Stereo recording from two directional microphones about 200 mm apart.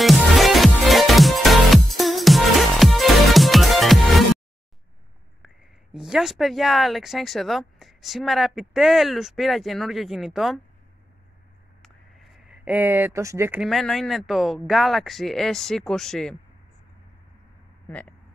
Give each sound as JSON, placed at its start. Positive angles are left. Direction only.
{"t": 0.0, "sound": "music", "side_deg": 0}
{"t": 5.9, "sound": "speech", "side_deg": 0}
{"t": 11.8, "sound": "speech", "side_deg": 0}
{"t": 17.8, "sound": "speech", "side_deg": 5}